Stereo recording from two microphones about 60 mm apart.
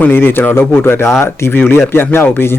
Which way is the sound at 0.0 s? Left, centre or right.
Left.